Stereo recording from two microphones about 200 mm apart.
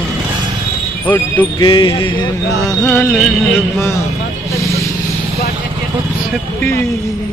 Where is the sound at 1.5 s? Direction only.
25° left (ahead or behind).